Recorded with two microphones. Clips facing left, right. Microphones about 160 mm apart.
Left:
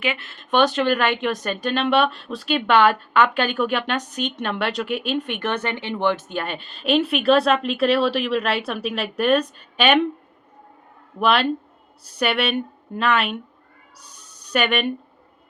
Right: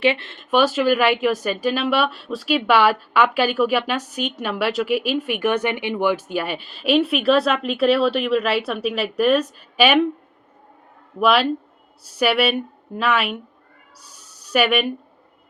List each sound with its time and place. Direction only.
0.0 s speech: 30° right (ahead or behind)
0.5 s speech: 5° right (ahead or behind)
11.2 s speech: 5° right (ahead or behind)
14.0 s a sound: 5° right (ahead or behind)